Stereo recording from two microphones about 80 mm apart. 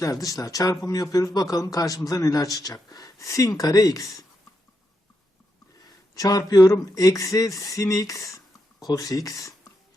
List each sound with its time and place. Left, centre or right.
0.0 s speech: left
6.1 s speech: left